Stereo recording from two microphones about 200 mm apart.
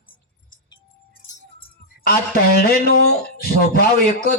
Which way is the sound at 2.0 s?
50° left (ahead or behind).